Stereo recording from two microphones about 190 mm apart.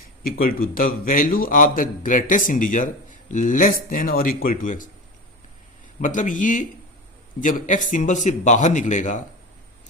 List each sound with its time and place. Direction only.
0.2 s a man's voice: 50° left (ahead or behind)
6.0 s a man's voice: 45° left (ahead or behind)